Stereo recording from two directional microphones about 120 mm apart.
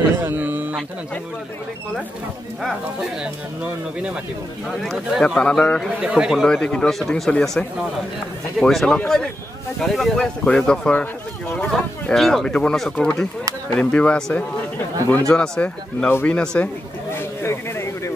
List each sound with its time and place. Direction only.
0.2 s speech: 15° right (ahead or behind)
2.6 s speech: centre (ahead or behind)
4.8 s speech: centre (ahead or behind)
5.9 s speech: 5° right (ahead or behind)
6.5 s speech: 5° left (ahead or behind)
16.1 s speech: 15° left (ahead or behind)
17.1 s a sound: 20° left (ahead or behind)